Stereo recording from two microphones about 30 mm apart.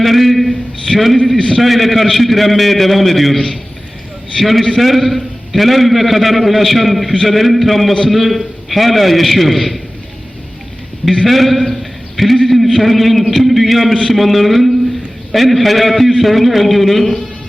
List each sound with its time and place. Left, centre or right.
0.0 s a man's voice: centre
3.3 s a man's voice: centre
4.4 s a man's voice: centre
11.3 s a man's voice: centre